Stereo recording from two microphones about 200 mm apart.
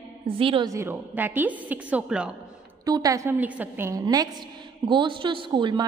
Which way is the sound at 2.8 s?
20° right (ahead or behind).